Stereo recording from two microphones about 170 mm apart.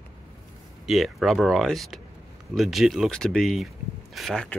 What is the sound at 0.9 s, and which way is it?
Speech, centre (ahead or behind).